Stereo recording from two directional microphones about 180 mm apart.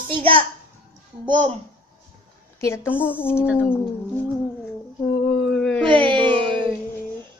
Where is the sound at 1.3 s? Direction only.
40° right (ahead or behind).